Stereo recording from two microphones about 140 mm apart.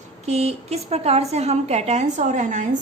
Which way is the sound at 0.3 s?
50° right (ahead or behind).